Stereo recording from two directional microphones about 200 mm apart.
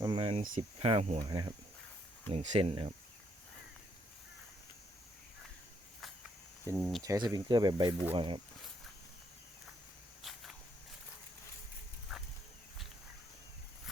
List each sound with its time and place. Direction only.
0.0 s cricket: 25° right (ahead or behind)
0.8 s speech: 30° right (ahead or behind)
1.2 s speech: 20° right (ahead or behind)
2.3 s speech: 35° right (ahead or behind)
6.7 s speech: 10° right (ahead or behind)
10.3 s walk: centre (ahead or behind)